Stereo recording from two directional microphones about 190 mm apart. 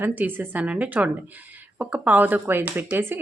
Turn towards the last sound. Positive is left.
turn(degrees=-10)  # may be behind; listen again after turning